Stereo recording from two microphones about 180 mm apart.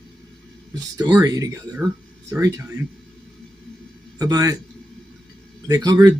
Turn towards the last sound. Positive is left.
turn(degrees=-20)  # may be behind; listen again after turning